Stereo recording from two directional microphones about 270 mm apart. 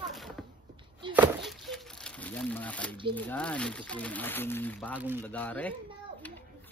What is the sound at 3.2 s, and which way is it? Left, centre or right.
Speech, centre.